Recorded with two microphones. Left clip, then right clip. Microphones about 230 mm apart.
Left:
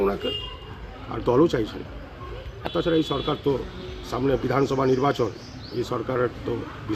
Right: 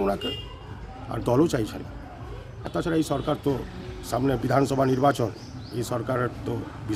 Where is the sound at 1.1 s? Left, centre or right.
Right.